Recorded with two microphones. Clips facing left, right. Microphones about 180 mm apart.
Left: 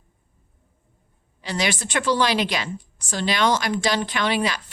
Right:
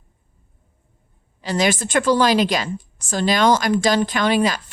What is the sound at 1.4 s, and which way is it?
Speech, 45° right (ahead or behind).